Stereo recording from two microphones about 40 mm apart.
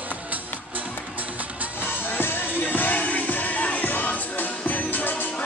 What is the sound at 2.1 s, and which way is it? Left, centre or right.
Music, left.